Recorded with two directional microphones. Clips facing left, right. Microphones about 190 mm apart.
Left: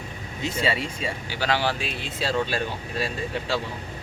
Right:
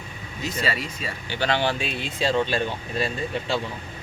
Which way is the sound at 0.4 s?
25° left (ahead or behind).